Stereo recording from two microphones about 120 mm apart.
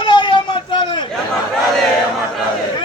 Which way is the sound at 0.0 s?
40° left (ahead or behind).